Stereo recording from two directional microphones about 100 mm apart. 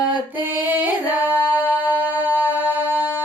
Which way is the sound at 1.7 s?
15° right (ahead or behind).